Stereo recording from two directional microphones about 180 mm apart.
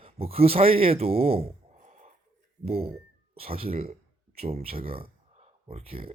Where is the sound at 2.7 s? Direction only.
35° right (ahead or behind).